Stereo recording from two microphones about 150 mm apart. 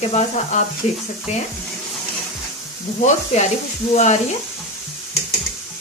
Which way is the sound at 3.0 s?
50° left (ahead or behind).